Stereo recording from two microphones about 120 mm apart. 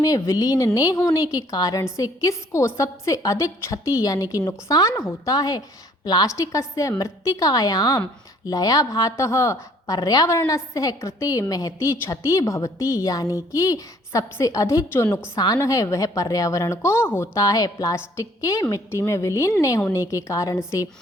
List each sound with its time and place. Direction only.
0.0 s a woman's voice: 30° left (ahead or behind)